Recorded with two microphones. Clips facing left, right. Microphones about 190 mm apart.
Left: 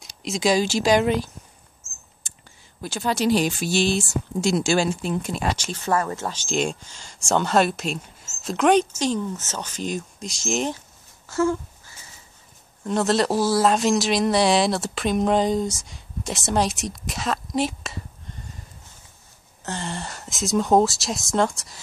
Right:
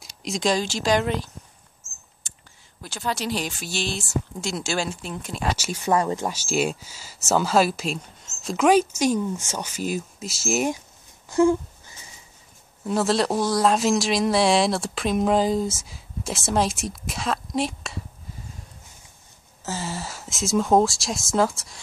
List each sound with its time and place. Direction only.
0.2 s speech: centre (ahead or behind)
3.1 s speech: 5° left (ahead or behind)
5.6 s speech: 10° right (ahead or behind)
11.2 s a sound: 15° right (ahead or behind)
12.8 s speech: centre (ahead or behind)